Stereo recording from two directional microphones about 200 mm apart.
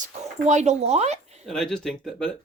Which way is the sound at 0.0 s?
35° right (ahead or behind).